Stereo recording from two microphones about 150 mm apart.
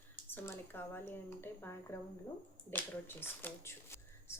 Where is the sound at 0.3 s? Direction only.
15° left (ahead or behind).